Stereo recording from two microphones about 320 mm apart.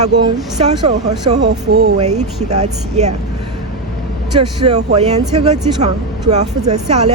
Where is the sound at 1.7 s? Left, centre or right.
Right.